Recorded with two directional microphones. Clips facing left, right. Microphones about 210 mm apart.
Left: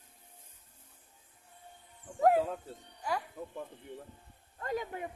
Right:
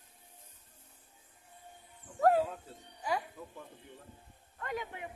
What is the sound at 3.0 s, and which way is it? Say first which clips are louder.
Speech: right 1 dB; 5° right (ahead or behind).